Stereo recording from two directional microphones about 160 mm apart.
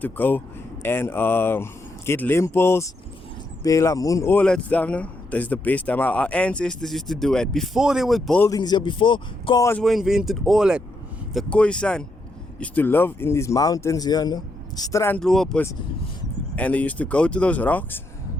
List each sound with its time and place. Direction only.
0.0 s a man's voice: 10° left (ahead or behind)
4.4 s speech: 5° left (ahead or behind)
8.4 s a man's voice: 25° left (ahead or behind)
9.8 s speech: centre (ahead or behind)
11.3 s speech: 5° left (ahead or behind)
15.2 s speech: 5° left (ahead or behind)